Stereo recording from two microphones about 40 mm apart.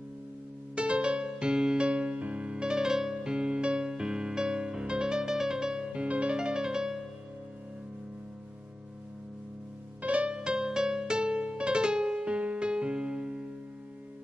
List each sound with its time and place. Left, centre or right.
0.7 s music: right
5.9 s music: right
6.3 s music: right
10.0 s music: right
10.3 s music: centre